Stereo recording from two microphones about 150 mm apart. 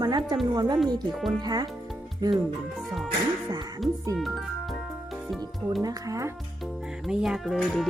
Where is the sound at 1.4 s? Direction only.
30° right (ahead or behind).